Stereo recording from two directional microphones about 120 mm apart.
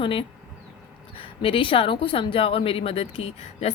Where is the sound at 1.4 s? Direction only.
45° left (ahead or behind).